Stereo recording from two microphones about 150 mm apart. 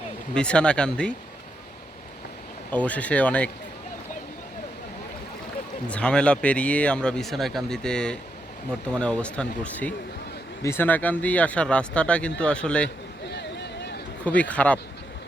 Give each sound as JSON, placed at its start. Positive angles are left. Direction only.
{"t": 0.3, "sound": "speech", "side_deg": 5}
{"t": 2.6, "sound": "speech", "side_deg": 10}
{"t": 5.9, "sound": "speech", "side_deg": 5}
{"t": 14.3, "sound": "speech", "side_deg": 10}